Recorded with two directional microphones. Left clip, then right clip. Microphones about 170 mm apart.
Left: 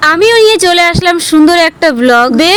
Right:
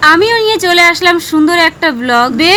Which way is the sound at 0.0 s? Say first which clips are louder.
Left 2 dB; 35° left (ahead or behind).